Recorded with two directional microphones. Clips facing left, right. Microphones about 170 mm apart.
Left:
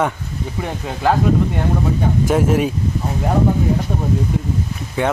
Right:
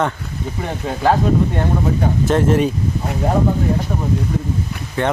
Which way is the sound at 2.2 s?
10° left (ahead or behind).